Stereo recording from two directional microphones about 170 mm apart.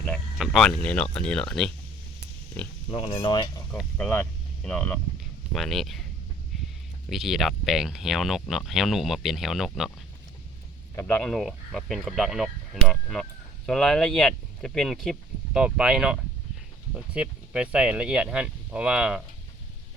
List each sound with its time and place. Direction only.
0.0 s speech: 5° left (ahead or behind)
2.9 s speech: 35° left (ahead or behind)
3.7 s speech: 5° left (ahead or behind)
7.1 s speech: centre (ahead or behind)
10.9 s speech: 10° left (ahead or behind)